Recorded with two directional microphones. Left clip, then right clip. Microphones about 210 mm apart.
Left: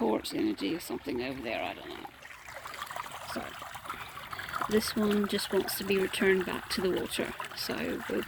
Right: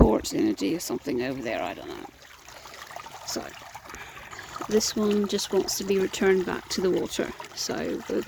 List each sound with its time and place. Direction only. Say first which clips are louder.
0.1 s speech: right 6 dB; 30° right (ahead or behind)
4.5 s speech: right 4 dB; 15° right (ahead or behind)